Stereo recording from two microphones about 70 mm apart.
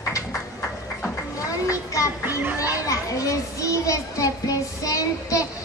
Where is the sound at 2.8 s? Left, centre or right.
Left.